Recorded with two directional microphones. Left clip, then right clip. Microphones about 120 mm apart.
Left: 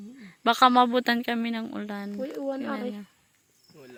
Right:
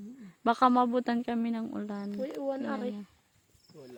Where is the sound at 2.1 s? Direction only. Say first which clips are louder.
Left 2 dB; 65° left (ahead or behind); by 2.9 s 90° left.